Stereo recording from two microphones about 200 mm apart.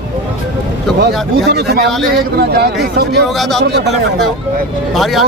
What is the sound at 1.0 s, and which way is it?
Speech, 55° right (ahead or behind).